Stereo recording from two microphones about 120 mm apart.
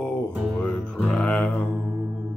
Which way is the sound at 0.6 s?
10° left (ahead or behind).